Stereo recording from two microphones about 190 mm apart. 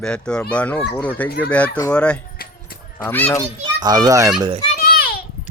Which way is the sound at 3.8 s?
20° right (ahead or behind).